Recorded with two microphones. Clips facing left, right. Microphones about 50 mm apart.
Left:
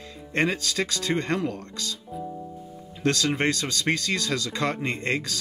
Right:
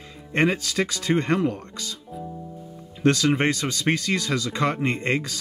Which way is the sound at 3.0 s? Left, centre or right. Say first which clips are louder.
Right 4 dB; centre.